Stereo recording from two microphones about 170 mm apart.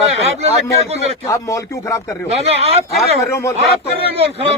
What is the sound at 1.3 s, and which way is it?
Speech, 20° left (ahead or behind).